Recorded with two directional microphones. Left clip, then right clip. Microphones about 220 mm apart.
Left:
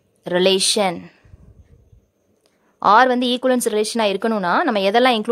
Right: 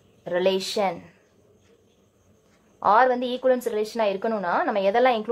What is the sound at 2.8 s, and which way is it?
A woman's voice, 50° left (ahead or behind).